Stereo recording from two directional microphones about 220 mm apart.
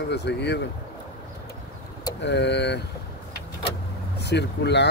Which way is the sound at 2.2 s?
50° left (ahead or behind).